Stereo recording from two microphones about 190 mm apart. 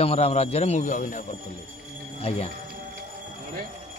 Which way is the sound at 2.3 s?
30° left (ahead or behind).